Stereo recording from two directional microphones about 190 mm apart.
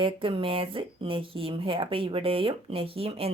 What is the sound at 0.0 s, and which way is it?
Speech, 25° right (ahead or behind).